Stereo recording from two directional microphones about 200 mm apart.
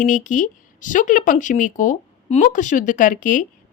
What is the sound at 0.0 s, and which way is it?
Speech, 40° left (ahead or behind).